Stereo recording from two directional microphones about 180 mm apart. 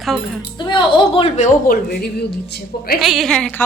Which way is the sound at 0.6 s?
25° left (ahead or behind).